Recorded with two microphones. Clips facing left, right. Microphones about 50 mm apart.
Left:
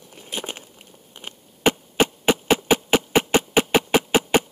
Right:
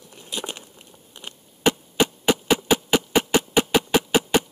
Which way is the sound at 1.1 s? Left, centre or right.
Left.